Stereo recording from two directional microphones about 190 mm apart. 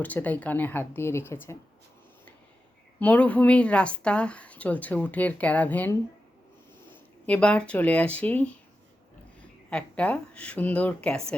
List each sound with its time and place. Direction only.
0.0 s a woman's voice: 10° left (ahead or behind)
3.0 s a woman's voice: 10° left (ahead or behind)
7.3 s a woman's voice: 5° left (ahead or behind)